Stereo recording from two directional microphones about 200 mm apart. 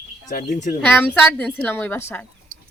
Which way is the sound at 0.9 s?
5° left (ahead or behind).